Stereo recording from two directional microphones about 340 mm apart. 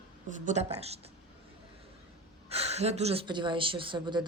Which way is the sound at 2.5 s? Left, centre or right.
Centre.